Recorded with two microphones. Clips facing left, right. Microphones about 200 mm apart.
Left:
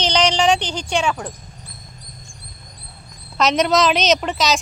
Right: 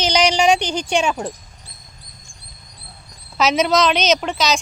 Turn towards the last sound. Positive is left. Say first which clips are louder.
# even
turn(degrees=0)  # may be behind; listen again after turning